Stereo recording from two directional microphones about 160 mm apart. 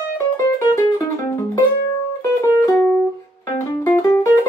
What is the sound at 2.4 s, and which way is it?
Music, 20° left (ahead or behind).